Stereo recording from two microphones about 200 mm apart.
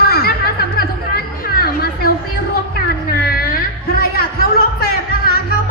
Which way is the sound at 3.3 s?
50° left (ahead or behind).